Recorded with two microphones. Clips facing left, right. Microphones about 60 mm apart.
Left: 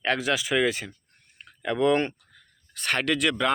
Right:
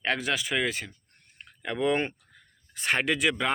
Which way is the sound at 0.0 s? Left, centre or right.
Centre.